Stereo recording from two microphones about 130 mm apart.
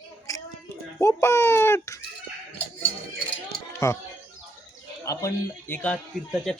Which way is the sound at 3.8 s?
25° left (ahead or behind).